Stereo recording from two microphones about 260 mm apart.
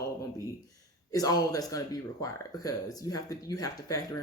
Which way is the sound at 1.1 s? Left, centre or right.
Centre.